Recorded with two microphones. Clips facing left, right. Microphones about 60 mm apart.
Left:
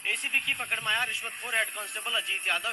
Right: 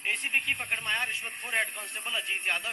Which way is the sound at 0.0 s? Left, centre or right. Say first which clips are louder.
Even; right.